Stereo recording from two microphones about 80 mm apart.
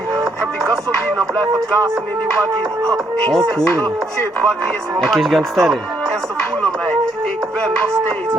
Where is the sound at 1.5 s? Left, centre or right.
Right.